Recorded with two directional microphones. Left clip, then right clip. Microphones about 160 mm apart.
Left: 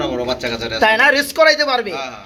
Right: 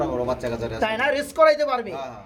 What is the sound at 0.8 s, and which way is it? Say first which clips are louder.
Speech: left 10 dB; 10° left (ahead or behind).